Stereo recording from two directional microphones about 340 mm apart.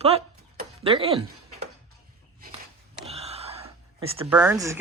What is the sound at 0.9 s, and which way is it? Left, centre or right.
Speech, centre.